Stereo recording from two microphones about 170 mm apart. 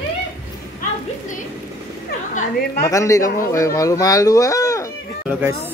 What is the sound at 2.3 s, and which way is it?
Speech, 60° left (ahead or behind).